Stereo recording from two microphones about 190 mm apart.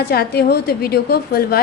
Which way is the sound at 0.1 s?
55° left (ahead or behind).